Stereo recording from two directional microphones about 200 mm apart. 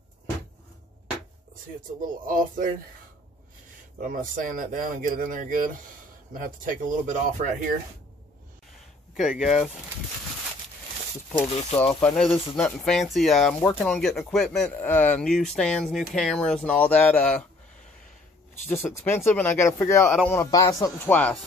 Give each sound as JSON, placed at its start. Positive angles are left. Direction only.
{"t": 1.9, "sound": "speech", "side_deg": -45}
{"t": 4.0, "sound": "speech", "side_deg": -40}
{"t": 9.1, "sound": "speech", "side_deg": -5}
{"t": 11.4, "sound": "speech", "side_deg": 30}
{"t": 12.5, "sound": "speech", "side_deg": 5}
{"t": 18.5, "sound": "speech", "side_deg": 10}